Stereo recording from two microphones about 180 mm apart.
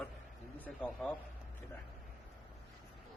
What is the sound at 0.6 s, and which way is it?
Speech, 5° left (ahead or behind).